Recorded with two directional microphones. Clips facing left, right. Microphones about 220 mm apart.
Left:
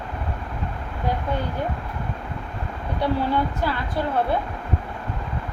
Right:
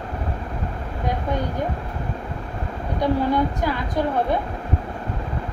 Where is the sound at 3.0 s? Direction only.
15° right (ahead or behind).